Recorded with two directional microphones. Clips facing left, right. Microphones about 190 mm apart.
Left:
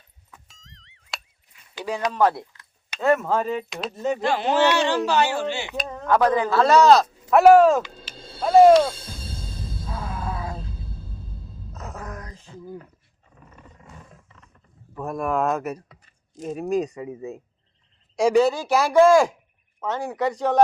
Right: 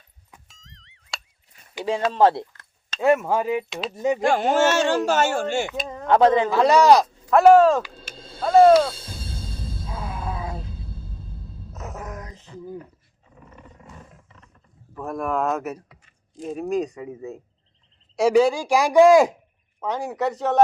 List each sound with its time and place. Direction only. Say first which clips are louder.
0.4 s a sound: right 1 dB; centre (ahead or behind)
2.0 s speech: right 3 dB; 25° right (ahead or behind)
3.0 s a man's voice: right 1 dB; 15° right (ahead or behind)
4.2 s speech: right 1 dB; 45° right (ahead or behind)
6.1 s a man's voice: right 3 dB; 25° right (ahead or behind)
7.3 s speech: even; 5° left (ahead or behind)
9.9 s music: left 1 dB; 20° right (ahead or behind)
11.7 s music: right 1 dB; 20° right (ahead or behind)
14.9 s speech: left 1 dB; centre (ahead or behind)
18.2 s a man's voice: right 1 dB; 10° right (ahead or behind)